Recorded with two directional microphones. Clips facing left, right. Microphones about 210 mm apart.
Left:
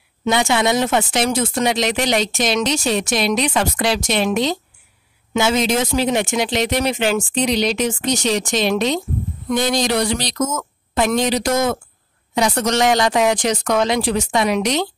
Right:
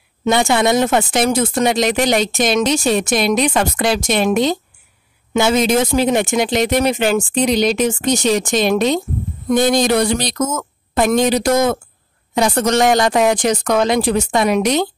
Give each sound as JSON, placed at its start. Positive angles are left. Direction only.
{"t": 0.2, "sound": "speech", "side_deg": -50}